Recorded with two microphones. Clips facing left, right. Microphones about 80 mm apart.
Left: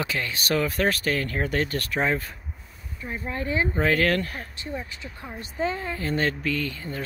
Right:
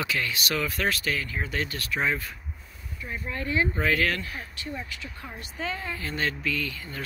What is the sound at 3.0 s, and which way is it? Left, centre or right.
Speech, left.